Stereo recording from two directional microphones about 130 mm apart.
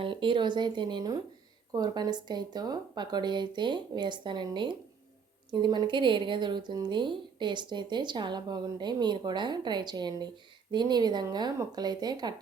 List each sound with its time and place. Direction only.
0.0 s speech: 40° right (ahead or behind)